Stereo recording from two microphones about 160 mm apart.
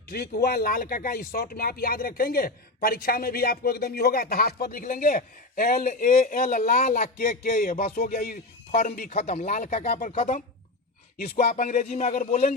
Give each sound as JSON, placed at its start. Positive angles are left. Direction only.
{"t": 0.1, "sound": "speech", "side_deg": 70}
{"t": 9.0, "sound": "speech", "side_deg": 45}
{"t": 9.8, "sound": "speech", "side_deg": 75}
{"t": 10.2, "sound": "speech", "side_deg": 55}
{"t": 11.4, "sound": "speech", "side_deg": 55}